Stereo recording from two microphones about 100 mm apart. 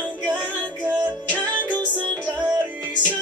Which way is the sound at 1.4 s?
15° left (ahead or behind).